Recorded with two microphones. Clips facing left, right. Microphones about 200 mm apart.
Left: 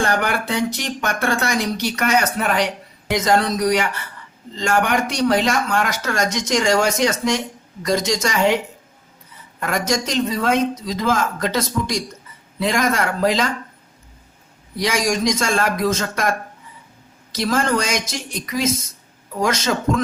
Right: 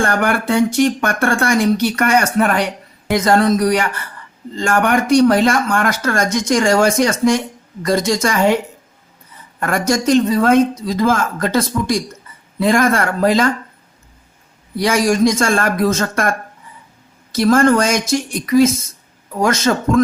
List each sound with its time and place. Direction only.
0.0 s speech: 50° right (ahead or behind)
9.6 s speech: 50° right (ahead or behind)
14.8 s speech: 55° right (ahead or behind)
17.3 s speech: 50° right (ahead or behind)